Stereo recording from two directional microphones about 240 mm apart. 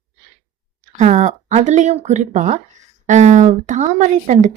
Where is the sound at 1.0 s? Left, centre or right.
Right.